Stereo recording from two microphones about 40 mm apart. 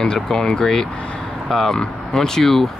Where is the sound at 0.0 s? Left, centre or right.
Centre.